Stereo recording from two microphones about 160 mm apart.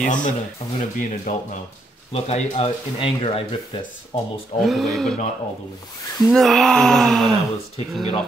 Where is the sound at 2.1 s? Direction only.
40° left (ahead or behind).